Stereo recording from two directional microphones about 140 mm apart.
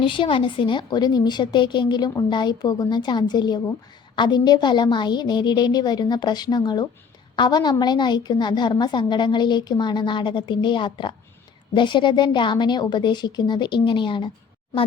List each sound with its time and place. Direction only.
0.0 s a woman's voice: 35° left (ahead or behind)